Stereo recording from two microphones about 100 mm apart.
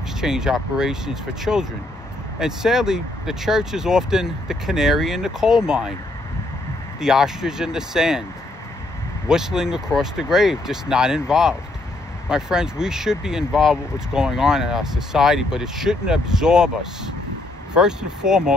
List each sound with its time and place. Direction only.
0.2 s speech: 5° right (ahead or behind)
7.0 s speech: 5° right (ahead or behind)
9.3 s speech: 5° right (ahead or behind)